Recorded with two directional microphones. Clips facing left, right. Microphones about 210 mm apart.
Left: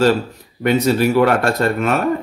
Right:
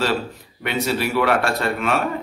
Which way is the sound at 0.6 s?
45° left (ahead or behind).